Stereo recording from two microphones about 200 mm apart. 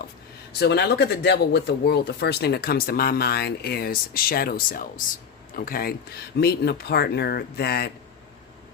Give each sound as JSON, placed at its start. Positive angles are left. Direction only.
{"t": 0.6, "sound": "speech", "side_deg": 55}